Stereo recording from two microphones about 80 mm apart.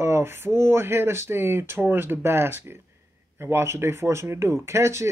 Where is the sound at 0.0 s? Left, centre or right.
Right.